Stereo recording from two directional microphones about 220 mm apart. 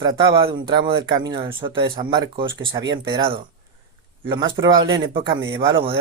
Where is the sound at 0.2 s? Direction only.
25° right (ahead or behind).